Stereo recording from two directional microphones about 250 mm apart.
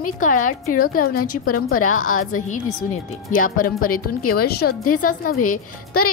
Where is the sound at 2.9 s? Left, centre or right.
Left.